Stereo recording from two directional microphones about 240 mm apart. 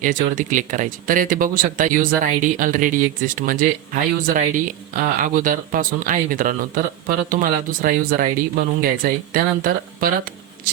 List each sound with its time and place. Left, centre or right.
0.0 s speech: right